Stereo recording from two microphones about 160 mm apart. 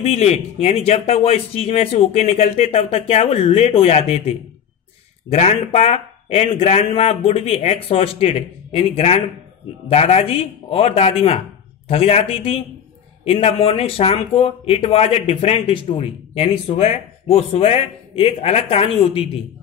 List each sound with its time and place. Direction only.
0.0 s speech: 40° left (ahead or behind)